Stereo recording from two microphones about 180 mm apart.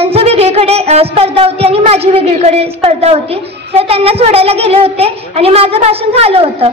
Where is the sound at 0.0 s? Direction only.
35° right (ahead or behind).